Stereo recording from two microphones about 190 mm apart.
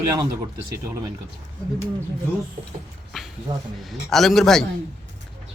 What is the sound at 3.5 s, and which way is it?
Speech, 20° right (ahead or behind).